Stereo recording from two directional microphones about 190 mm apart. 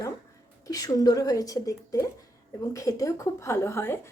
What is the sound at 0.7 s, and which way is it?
A woman's voice, 20° left (ahead or behind).